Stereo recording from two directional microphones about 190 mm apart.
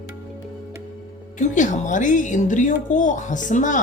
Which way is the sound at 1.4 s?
40° left (ahead or behind).